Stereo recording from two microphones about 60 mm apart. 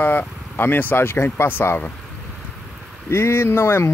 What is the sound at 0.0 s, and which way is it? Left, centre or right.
Speech, left.